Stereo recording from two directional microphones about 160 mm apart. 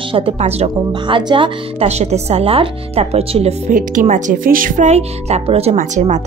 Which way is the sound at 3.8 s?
55° right (ahead or behind).